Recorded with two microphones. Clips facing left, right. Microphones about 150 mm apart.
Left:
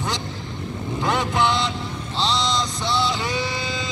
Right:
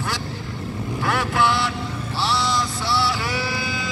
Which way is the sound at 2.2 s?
20° left (ahead or behind).